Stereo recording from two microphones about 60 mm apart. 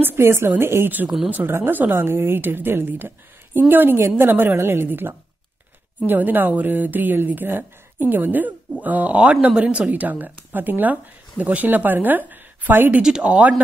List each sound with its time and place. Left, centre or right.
0.0 s a woman's voice: right
13.0 s speech: centre